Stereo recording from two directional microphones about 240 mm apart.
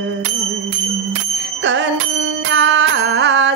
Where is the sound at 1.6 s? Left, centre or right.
Right.